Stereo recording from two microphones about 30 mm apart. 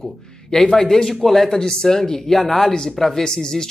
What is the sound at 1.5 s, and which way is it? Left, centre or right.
Speech, left.